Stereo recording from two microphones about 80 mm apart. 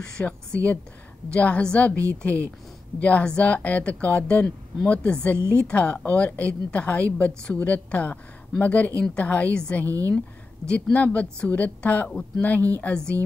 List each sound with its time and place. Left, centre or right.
0.0 s a woman's voice: centre
9.8 s a woman's voice: right
10.7 s a woman's voice: centre